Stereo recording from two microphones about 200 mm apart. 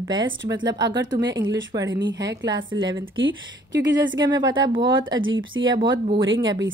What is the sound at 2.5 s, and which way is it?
Speech, 75° right (ahead or behind).